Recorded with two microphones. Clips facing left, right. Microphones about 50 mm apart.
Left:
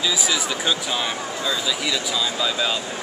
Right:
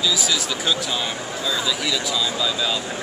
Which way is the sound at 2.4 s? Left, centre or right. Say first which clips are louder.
Even; centre.